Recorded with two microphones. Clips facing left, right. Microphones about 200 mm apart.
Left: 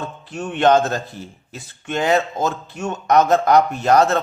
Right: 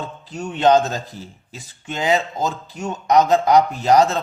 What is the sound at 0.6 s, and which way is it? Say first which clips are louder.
Speech: even; 15° right (ahead or behind).